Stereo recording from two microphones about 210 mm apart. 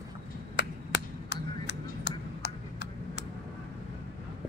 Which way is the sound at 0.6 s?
55° left (ahead or behind).